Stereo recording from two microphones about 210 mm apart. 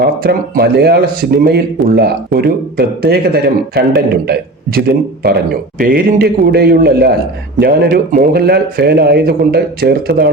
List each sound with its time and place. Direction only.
0.0 s speech: 50° right (ahead or behind)